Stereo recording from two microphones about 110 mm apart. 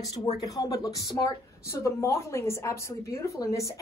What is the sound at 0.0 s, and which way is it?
Speech, 40° left (ahead or behind).